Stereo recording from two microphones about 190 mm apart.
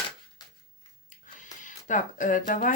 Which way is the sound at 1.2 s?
40° left (ahead or behind).